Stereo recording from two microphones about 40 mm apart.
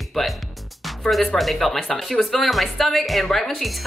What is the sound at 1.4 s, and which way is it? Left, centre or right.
A woman's voice, centre.